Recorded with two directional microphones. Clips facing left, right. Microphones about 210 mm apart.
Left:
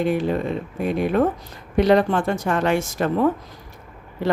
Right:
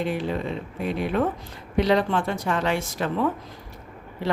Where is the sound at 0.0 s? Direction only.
45° left (ahead or behind).